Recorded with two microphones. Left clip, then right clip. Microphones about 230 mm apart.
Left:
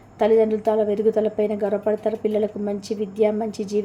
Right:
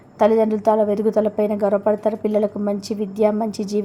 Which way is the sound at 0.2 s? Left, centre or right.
Right.